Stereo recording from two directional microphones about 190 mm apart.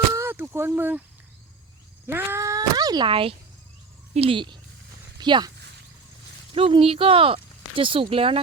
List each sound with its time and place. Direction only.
0.1 s a sound: 10° right (ahead or behind)
2.0 s speech: 10° right (ahead or behind)
6.5 s speech: 30° right (ahead or behind)